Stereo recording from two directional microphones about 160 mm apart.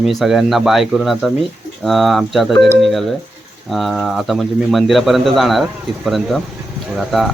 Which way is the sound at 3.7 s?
Centre (ahead or behind).